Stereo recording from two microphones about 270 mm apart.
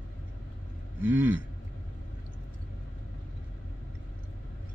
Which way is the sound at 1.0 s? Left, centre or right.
Centre.